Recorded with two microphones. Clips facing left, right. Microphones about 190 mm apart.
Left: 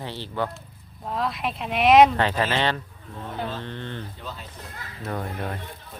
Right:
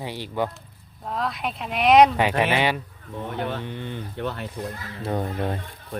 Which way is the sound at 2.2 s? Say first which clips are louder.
Right 2 dB; 15° right (ahead or behind).